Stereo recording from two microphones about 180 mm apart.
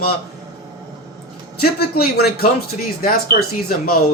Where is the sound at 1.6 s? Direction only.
60° left (ahead or behind).